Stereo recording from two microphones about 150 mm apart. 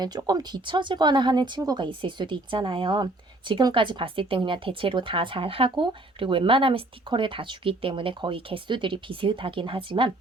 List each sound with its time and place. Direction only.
0.0 s speech: 25° right (ahead or behind)